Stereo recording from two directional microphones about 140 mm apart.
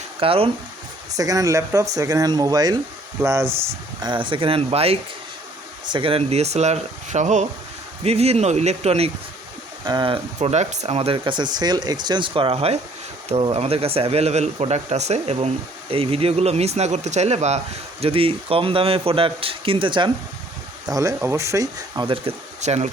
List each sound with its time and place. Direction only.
0.2 s a man's voice: 40° right (ahead or behind)
1.1 s speech: 25° right (ahead or behind)
4.0 s a man's voice: 35° right (ahead or behind); by 7.4 s 60° right (ahead or behind)
8.0 s speech: 45° right (ahead or behind)
9.8 s a man's voice: 30° right (ahead or behind)
10.5 s speech: 55° right (ahead or behind)
11.2 s a man's voice: 30° right (ahead or behind)
20.8 s speech: 25° right (ahead or behind)
22.0 s a man's voice: 40° right (ahead or behind)
22.6 s speech: 50° right (ahead or behind)